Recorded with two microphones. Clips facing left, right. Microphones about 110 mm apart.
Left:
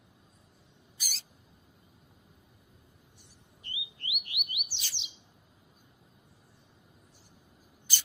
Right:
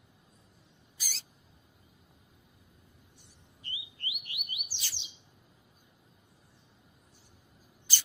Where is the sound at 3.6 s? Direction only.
Centre (ahead or behind).